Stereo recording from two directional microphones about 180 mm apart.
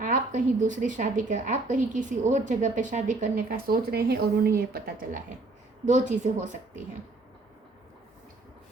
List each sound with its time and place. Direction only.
0.0 s speech: 45° right (ahead or behind)
5.8 s speech: 40° right (ahead or behind)